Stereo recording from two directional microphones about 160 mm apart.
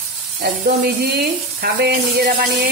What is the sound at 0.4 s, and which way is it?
Speech, 85° right.